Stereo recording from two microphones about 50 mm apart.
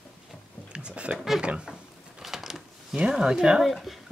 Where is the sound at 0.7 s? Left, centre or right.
Right.